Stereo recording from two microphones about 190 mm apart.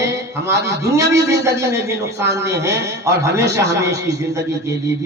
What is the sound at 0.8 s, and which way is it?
Speech, 15° right (ahead or behind).